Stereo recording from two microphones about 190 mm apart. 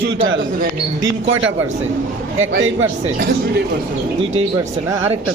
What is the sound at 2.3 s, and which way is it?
Speech, 90° right.